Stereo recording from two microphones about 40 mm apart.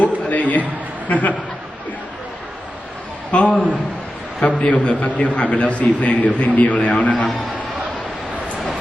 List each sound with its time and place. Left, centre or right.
0.0 s a sound: left
1.0 s a man's voice: left
3.3 s a man's voice: left